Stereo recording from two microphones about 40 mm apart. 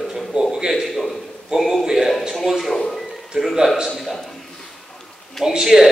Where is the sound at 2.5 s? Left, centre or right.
Centre.